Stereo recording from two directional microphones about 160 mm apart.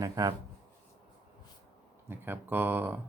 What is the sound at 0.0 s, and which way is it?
Speech, 20° right (ahead or behind).